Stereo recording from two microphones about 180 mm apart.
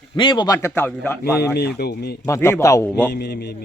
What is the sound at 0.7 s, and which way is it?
Speech, 10° left (ahead or behind).